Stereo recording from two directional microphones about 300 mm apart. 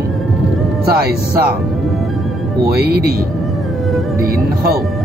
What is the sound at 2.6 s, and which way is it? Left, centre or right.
Speech, right.